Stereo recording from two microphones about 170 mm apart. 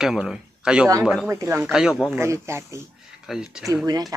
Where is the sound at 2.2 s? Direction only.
15° right (ahead or behind).